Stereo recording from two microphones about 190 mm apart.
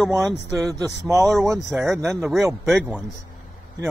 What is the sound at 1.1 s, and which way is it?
Speech, 15° right (ahead or behind).